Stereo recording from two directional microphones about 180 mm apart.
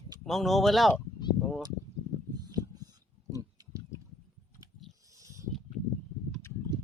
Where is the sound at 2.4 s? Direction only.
20° right (ahead or behind).